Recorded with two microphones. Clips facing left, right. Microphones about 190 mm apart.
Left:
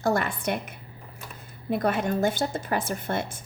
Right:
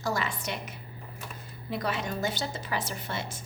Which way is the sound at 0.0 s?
55° left (ahead or behind).